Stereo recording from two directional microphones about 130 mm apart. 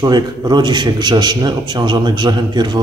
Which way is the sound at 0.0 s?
30° right (ahead or behind).